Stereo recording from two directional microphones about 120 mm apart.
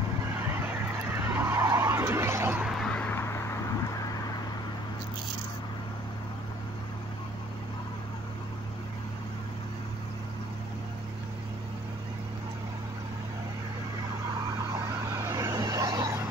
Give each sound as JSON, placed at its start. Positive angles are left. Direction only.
{"t": 1.2, "sound": "skidding", "side_deg": -15}
{"t": 2.9, "sound": "vehicle", "side_deg": 15}
{"t": 15.3, "sound": "vehicle", "side_deg": -30}